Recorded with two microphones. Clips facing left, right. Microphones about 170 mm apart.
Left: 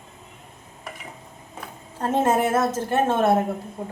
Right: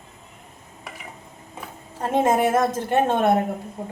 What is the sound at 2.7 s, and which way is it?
Speech, 15° right (ahead or behind).